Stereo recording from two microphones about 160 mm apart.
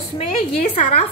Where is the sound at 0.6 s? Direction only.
40° left (ahead or behind).